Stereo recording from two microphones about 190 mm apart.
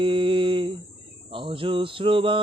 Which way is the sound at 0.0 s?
25° right (ahead or behind).